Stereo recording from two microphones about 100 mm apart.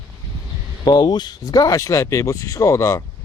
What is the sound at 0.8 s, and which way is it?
Speech, 45° left (ahead or behind).